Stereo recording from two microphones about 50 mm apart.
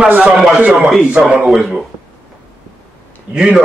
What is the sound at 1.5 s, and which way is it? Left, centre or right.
Speech, centre.